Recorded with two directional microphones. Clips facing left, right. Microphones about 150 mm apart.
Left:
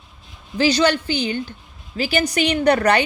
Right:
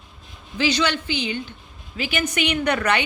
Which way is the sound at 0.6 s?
40° left (ahead or behind).